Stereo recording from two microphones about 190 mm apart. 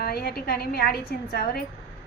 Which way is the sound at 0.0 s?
55° left (ahead or behind).